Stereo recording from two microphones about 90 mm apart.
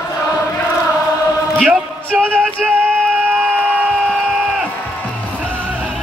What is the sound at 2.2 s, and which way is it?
Music, 10° left (ahead or behind).